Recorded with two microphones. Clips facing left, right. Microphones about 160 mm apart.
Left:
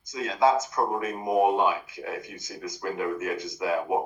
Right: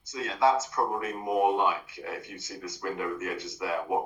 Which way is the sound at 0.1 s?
15° left (ahead or behind).